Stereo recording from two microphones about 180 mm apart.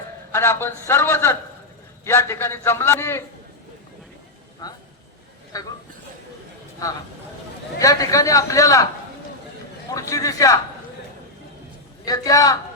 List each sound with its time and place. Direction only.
0.3 s a man's voice: 15° left (ahead or behind)
4.6 s a man's voice: 20° left (ahead or behind)
7.8 s a man's voice: 20° left (ahead or behind)
9.9 s a man's voice: 20° left (ahead or behind)
12.0 s a man's voice: 20° left (ahead or behind)